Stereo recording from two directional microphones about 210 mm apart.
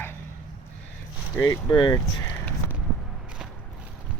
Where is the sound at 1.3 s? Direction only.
15° left (ahead or behind).